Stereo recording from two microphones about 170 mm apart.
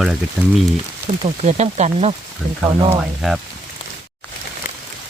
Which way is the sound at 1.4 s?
40° right (ahead or behind).